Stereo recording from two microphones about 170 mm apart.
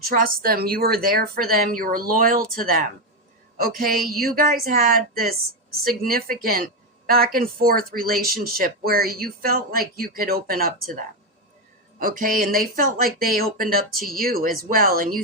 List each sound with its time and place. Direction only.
0.0 s speech: 55° right (ahead or behind)